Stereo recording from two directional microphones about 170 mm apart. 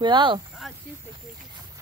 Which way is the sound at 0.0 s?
30° right (ahead or behind).